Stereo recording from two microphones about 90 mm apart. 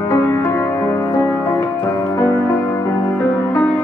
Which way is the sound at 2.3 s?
35° left (ahead or behind).